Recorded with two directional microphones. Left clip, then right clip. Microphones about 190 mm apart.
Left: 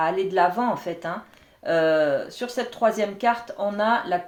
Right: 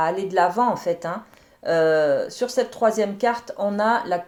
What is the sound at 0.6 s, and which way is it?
Speech, 40° right (ahead or behind).